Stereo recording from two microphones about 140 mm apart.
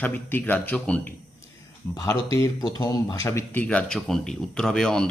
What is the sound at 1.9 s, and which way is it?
Speech, 25° left (ahead or behind).